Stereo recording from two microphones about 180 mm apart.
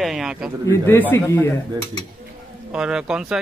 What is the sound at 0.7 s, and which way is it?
Speech, 10° left (ahead or behind).